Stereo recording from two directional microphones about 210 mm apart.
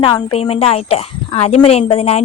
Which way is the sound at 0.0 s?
25° left (ahead or behind).